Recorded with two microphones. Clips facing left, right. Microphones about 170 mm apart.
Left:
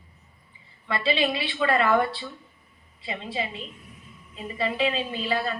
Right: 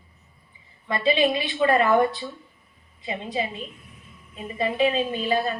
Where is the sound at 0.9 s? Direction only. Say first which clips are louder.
Right 4 dB; 20° right (ahead or behind).